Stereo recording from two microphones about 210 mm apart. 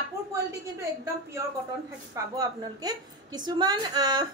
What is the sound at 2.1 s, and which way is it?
A woman's voice, 15° right (ahead or behind).